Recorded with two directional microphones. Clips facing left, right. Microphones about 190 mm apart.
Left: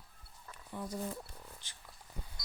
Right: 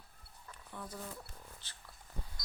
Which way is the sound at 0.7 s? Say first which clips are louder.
Left 6 dB; 15° left (ahead or behind).